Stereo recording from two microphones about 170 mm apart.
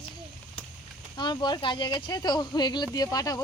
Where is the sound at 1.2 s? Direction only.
25° left (ahead or behind).